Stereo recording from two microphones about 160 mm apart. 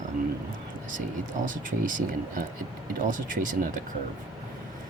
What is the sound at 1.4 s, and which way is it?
Speech, 55° right (ahead or behind).